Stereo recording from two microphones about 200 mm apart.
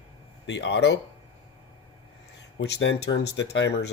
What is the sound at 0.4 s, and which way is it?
Speech, 65° left (ahead or behind).